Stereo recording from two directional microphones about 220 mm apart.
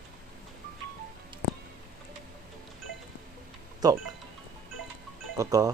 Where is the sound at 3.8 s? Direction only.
15° right (ahead or behind).